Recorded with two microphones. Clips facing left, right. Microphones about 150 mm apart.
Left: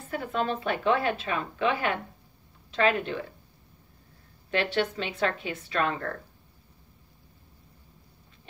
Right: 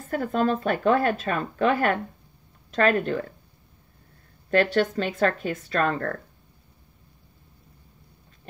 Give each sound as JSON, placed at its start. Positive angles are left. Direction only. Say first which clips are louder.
{"t": 0.1, "sound": "speech", "louder": "right 6 dB", "side_deg": -45}
{"t": 4.5, "sound": "speech", "louder": "right 6 dB", "side_deg": -45}